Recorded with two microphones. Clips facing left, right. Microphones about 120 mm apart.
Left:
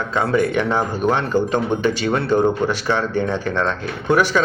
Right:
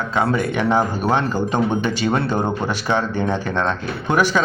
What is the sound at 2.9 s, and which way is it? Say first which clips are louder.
Speech: even; 25° right (ahead or behind).